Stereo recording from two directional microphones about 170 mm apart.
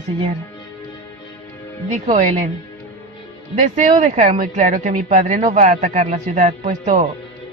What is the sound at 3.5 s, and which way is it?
A woman's voice, 45° right (ahead or behind).